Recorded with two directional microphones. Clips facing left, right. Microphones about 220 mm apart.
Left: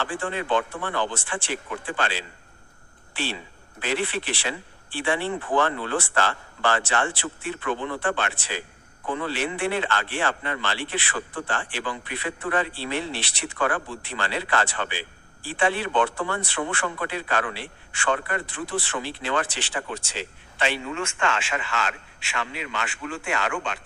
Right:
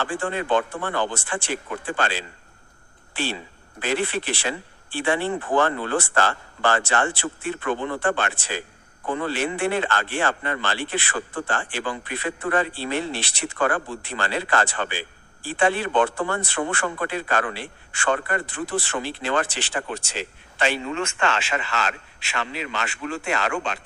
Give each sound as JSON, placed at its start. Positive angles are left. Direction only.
{"t": 0.0, "sound": "speech", "side_deg": -45}
{"t": 3.8, "sound": "speech", "side_deg": -45}